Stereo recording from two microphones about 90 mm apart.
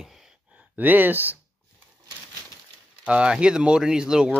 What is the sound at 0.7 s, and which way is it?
Speech, 20° right (ahead or behind).